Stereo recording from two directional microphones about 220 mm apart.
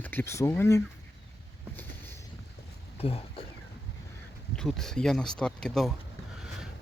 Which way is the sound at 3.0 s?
25° left (ahead or behind).